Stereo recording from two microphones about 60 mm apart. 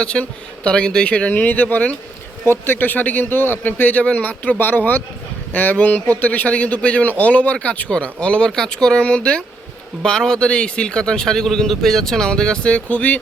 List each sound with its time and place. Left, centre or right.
0.0 s a man's voice: centre
2.4 s a man's voice: left